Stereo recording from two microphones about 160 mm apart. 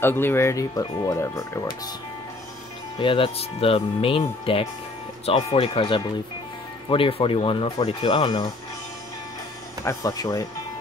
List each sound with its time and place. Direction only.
0.0 s speech: 15° left (ahead or behind)
3.0 s speech: 35° left (ahead or behind)
9.8 s speech: 25° left (ahead or behind)